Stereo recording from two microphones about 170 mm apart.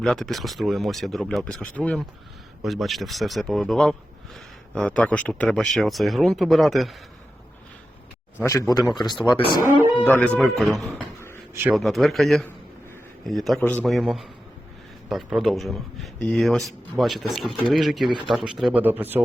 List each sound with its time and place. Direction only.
0.0 s speech: 5° left (ahead or behind)
8.4 s speech: 15° left (ahead or behind)
8.8 s speech: centre (ahead or behind)
9.2 s speech: 25° left (ahead or behind)
10.0 s speech: 5° left (ahead or behind); by 19.2 s 10° right (ahead or behind)